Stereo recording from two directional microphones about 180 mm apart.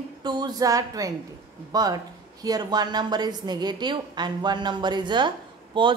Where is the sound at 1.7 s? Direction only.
20° right (ahead or behind).